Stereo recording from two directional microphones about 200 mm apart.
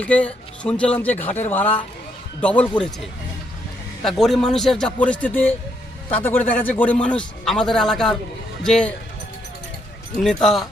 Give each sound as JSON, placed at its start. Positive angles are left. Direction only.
{"t": 0.0, "sound": "a man's voice", "side_deg": 5}
{"t": 4.0, "sound": "a man's voice", "side_deg": 0}
{"t": 10.2, "sound": "a man's voice", "side_deg": 0}